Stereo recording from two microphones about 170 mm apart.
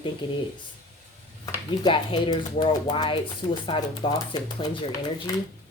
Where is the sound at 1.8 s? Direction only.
30° left (ahead or behind).